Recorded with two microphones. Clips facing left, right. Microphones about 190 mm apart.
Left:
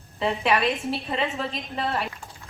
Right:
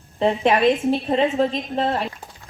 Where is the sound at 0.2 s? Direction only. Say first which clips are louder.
Right 6 dB; 40° right (ahead or behind).